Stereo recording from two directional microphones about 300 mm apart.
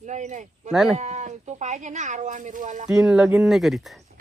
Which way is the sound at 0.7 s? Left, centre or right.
Centre.